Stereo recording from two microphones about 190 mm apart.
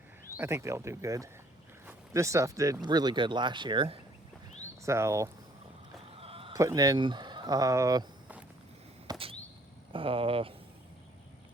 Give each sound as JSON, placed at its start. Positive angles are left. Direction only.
{"t": 0.3, "sound": "speech", "side_deg": -15}
{"t": 4.8, "sound": "speech", "side_deg": -15}
{"t": 6.1, "sound": "a sound", "side_deg": -30}
{"t": 6.5, "sound": "speech", "side_deg": -15}
{"t": 9.0, "sound": "a sound", "side_deg": -30}
{"t": 9.9, "sound": "speech", "side_deg": -30}